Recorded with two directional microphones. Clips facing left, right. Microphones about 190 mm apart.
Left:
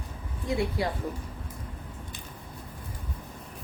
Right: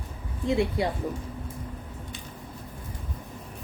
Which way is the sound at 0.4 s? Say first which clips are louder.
Right 4 dB; 25° right (ahead or behind).